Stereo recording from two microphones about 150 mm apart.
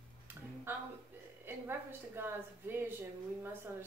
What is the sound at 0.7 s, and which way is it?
A woman's voice, 15° right (ahead or behind).